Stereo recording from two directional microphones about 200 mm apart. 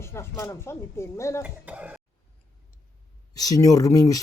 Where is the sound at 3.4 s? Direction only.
15° left (ahead or behind).